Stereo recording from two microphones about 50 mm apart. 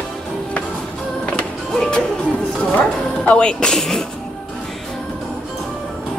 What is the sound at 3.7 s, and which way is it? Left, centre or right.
Speech, centre.